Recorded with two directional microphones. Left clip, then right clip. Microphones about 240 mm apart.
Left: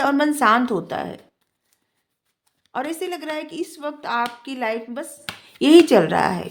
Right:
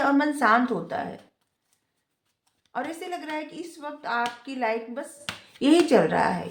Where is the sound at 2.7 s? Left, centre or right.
Left.